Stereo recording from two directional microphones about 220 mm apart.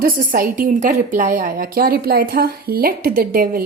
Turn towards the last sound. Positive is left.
turn(degrees=-40)  # may be behind; listen again after turning